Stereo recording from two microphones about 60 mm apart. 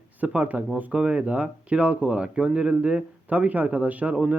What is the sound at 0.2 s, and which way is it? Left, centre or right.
Speech, right.